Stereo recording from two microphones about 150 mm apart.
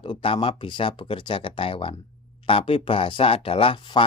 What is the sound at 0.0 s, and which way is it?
Speech, 35° left (ahead or behind).